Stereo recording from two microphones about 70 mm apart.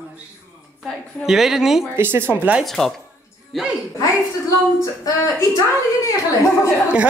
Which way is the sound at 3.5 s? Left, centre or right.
Centre.